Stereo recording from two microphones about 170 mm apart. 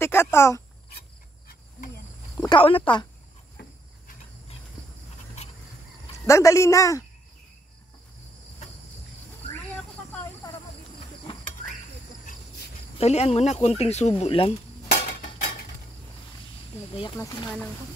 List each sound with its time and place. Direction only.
0.0 s a sound: 15° left (ahead or behind)
2.3 s a sound: 20° left (ahead or behind)
2.6 s speech: 30° left (ahead or behind)
6.2 s speech: 15° left (ahead or behind)
13.0 s speech: 40° left (ahead or behind)
15.0 s cutlery: 35° left (ahead or behind)